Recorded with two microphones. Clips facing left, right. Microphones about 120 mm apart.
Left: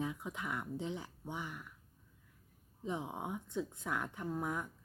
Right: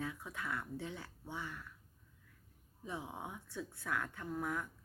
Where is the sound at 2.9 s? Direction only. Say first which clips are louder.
Left 5 dB; 20° left (ahead or behind).